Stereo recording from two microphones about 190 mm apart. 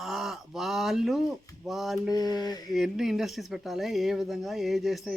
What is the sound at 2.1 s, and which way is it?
Speech, 20° left (ahead or behind).